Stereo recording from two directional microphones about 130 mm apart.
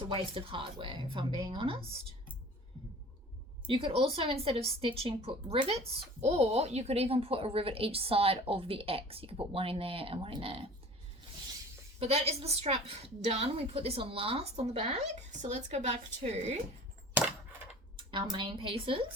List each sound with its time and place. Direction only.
0.0 s a woman's voice: 40° right (ahead or behind)
3.7 s a woman's voice: 45° right (ahead or behind)
11.9 s a woman's voice: 50° right (ahead or behind)
18.1 s a woman's voice: 35° right (ahead or behind)